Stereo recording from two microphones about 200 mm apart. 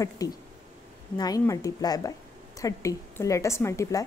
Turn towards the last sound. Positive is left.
turn(degrees=15)  # may be behind; listen again after turning